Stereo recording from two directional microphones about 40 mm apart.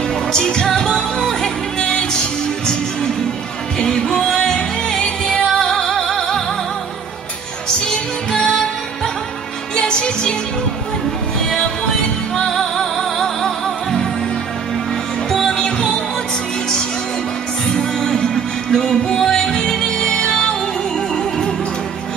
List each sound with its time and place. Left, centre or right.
0.3 s music: centre
3.7 s music: centre
4.1 s music: centre
4.4 s music: centre
7.8 s music: centre
12.4 s music: centre
15.2 s music: centre
17.6 s music: centre